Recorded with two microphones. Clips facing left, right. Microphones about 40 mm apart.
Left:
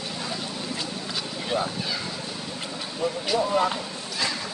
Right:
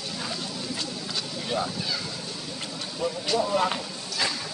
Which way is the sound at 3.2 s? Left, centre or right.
Centre.